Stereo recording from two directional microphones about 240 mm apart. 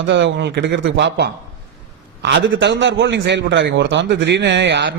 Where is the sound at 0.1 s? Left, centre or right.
Right.